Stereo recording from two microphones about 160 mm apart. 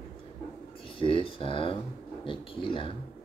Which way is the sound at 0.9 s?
35° left (ahead or behind).